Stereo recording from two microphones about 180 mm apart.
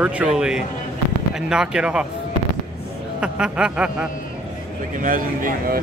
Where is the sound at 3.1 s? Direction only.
5° right (ahead or behind).